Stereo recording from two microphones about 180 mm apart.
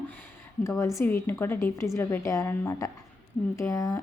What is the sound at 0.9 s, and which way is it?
A woman's voice, 10° left (ahead or behind).